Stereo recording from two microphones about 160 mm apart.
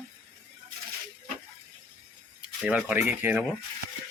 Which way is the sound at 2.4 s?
10° right (ahead or behind).